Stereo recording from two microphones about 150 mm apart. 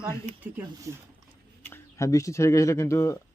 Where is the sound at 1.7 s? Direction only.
20° left (ahead or behind).